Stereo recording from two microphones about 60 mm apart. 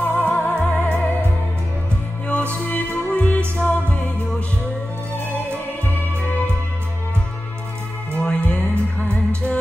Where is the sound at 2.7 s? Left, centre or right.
Left.